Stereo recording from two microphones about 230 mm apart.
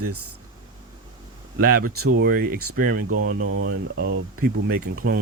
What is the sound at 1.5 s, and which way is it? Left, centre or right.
Speech, right.